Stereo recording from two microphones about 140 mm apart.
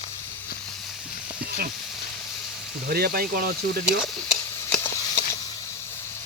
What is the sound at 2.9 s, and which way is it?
Speech, 90° right.